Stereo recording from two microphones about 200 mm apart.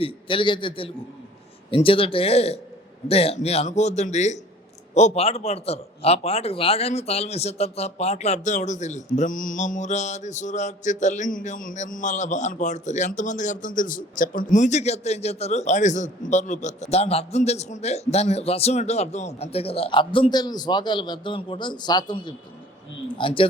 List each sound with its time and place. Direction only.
0.0 s a man's voice: 25° left (ahead or behind)
3.1 s mantra: 30° left (ahead or behind)
23.1 s a man's voice: 25° left (ahead or behind)